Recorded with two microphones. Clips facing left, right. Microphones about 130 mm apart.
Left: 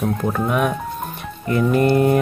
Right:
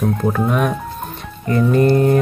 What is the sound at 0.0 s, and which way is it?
Speech, centre (ahead or behind).